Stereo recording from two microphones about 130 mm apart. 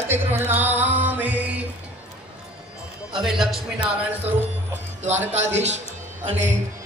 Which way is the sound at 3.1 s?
5° right (ahead or behind).